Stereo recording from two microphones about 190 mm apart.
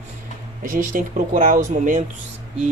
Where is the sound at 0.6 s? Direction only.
45° right (ahead or behind).